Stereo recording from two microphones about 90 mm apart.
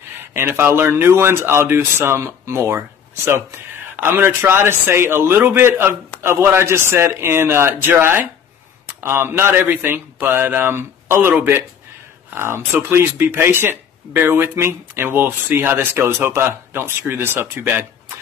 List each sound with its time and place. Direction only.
0.3 s speech: 25° right (ahead or behind)
3.9 s speech: 25° right (ahead or behind)